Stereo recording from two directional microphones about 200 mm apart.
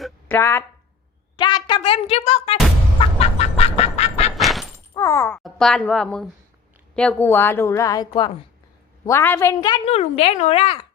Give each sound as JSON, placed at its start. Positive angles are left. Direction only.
{"t": 0.3, "sound": "a woman's voice", "side_deg": 10}
{"t": 1.4, "sound": "a woman's voice", "side_deg": 25}
{"t": 3.0, "sound": "duck", "side_deg": 30}
{"t": 4.3, "sound": "a sound", "side_deg": 0}
{"t": 4.9, "sound": "speech", "side_deg": 15}
{"t": 5.4, "sound": "a woman's voice", "side_deg": 0}